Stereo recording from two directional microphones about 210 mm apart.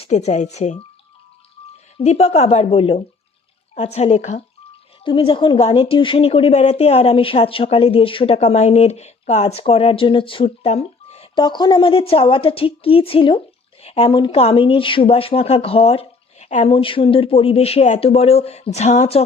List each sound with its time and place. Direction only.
0.0 s speech: 30° left (ahead or behind)
2.0 s a woman's voice: 30° left (ahead or behind)